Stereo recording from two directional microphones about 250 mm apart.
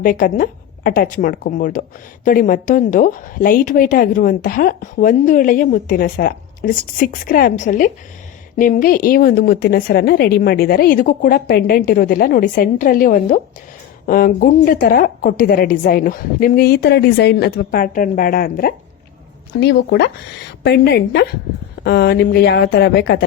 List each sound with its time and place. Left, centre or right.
0.0 s a woman's voice: left